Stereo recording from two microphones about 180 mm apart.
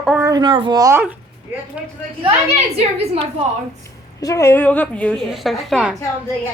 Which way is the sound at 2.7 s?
35° right (ahead or behind).